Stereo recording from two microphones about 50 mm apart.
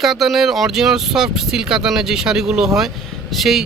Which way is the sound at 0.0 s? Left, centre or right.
Centre.